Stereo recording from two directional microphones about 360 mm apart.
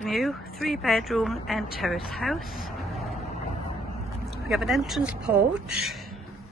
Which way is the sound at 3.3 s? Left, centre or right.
Left.